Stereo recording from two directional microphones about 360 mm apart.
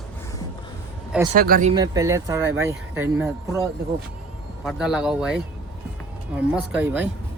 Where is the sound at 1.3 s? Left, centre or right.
Right; by 3.6 s centre.